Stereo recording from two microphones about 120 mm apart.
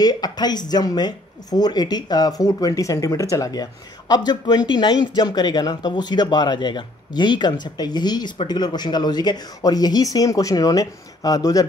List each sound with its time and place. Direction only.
0.0 s speech: 35° left (ahead or behind)